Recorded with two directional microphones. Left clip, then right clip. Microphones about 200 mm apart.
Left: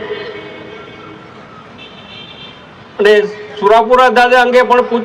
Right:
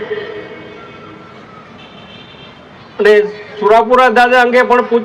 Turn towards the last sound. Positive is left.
turn(degrees=45)  # may be behind; listen again after turning